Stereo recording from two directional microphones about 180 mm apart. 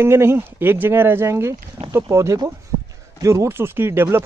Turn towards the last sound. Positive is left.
turn(degrees=-15)  # may be behind; listen again after turning